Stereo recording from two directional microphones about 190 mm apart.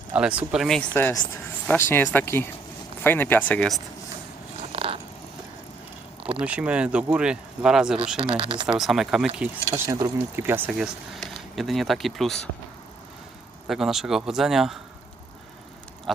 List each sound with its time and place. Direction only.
0.1 s speech: 5° right (ahead or behind)
0.9 s speech: 10° left (ahead or behind)
4.7 s cat: 30° right (ahead or behind)
6.4 s speech: 5° right (ahead or behind)
8.4 s speech: 25° right (ahead or behind)
8.6 s speech: centre (ahead or behind)
13.7 s speech: centre (ahead or behind)
16.1 s speech: centre (ahead or behind)